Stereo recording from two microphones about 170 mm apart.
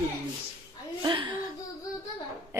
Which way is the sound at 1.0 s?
25° right (ahead or behind).